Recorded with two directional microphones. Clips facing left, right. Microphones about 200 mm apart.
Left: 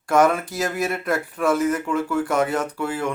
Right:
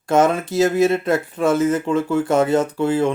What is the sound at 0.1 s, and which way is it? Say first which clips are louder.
Speech: right 2 dB; 25° right (ahead or behind).